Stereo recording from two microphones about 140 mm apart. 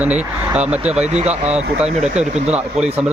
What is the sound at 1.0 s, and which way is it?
Speech, 50° right (ahead or behind).